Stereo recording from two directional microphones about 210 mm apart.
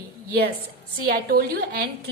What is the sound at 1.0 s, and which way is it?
Speech, 45° right (ahead or behind).